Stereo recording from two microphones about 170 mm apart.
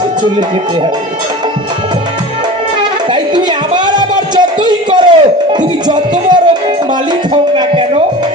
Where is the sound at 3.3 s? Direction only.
25° right (ahead or behind).